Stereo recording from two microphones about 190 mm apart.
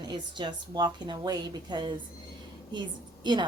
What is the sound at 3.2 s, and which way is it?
Speech, 25° right (ahead or behind).